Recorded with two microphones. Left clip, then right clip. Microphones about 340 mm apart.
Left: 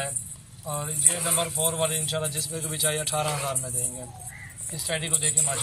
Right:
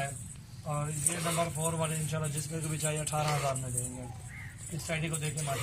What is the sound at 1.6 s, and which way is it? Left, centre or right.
Speech, centre.